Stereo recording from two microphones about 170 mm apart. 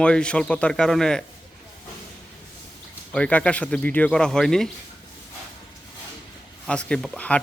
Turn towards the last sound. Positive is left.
turn(degrees=10)  # may be behind; listen again after turning